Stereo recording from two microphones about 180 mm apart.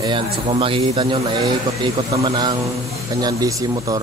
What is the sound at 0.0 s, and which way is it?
A man's voice, 30° right (ahead or behind).